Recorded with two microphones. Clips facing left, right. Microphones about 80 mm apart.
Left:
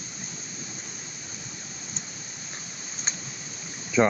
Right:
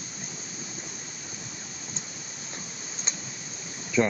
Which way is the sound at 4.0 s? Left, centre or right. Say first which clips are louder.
Left 3 dB; left.